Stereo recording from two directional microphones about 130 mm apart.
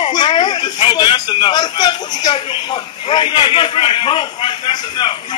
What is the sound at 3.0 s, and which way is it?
A man's voice, 40° left (ahead or behind).